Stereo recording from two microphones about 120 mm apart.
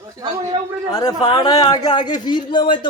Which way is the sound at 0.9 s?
35° left (ahead or behind).